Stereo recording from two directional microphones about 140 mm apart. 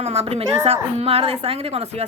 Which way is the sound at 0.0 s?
45° right (ahead or behind).